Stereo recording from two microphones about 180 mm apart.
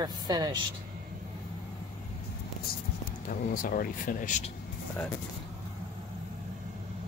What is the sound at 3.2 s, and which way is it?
Speech, 50° left (ahead or behind).